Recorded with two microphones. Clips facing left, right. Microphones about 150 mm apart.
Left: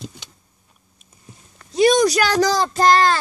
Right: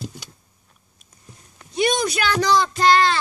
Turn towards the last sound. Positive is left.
turn(degrees=45)  # may be behind; listen again after turning